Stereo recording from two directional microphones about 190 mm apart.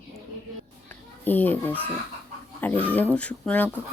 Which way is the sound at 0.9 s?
10° left (ahead or behind).